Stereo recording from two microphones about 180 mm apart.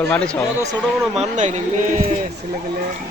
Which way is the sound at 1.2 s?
40° right (ahead or behind).